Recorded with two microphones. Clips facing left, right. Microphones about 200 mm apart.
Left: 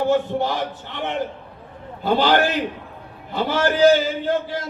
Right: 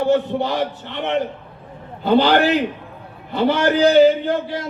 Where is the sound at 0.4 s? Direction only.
60° right (ahead or behind).